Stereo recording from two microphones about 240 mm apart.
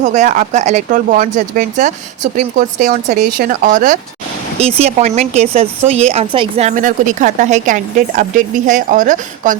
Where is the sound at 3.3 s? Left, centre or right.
Right.